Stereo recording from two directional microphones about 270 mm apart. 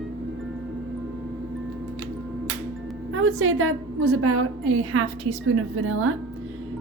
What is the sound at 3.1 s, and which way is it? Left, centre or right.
A woman's voice, right.